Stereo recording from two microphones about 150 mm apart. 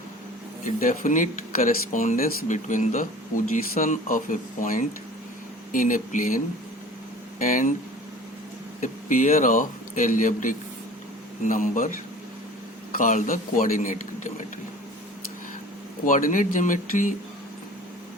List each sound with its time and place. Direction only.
0.8 s speech: 60° left (ahead or behind)
8.8 s speech: 60° left (ahead or behind)
12.9 s speech: 60° left (ahead or behind)
16.0 s speech: 60° left (ahead or behind)